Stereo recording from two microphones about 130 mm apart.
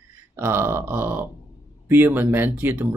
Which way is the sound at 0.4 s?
20° right (ahead or behind).